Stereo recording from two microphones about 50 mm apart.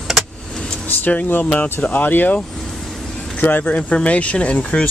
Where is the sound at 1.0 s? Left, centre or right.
Left.